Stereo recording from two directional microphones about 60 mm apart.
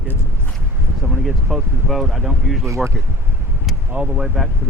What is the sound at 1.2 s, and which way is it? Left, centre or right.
Speech, centre.